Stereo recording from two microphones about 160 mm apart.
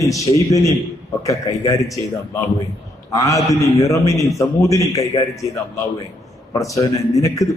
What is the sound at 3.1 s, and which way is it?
A man's voice, 20° left (ahead or behind).